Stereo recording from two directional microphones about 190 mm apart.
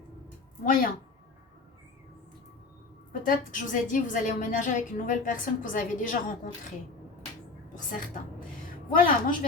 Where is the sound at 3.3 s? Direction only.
45° left (ahead or behind).